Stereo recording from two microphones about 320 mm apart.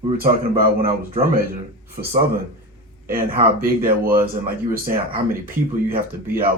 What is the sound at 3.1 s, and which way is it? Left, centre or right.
Speech, right.